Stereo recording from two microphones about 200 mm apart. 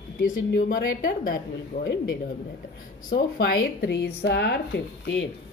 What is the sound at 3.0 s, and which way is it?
Speech, 45° left (ahead or behind).